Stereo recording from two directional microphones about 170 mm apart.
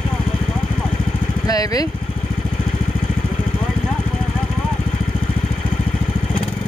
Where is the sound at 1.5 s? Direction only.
20° left (ahead or behind).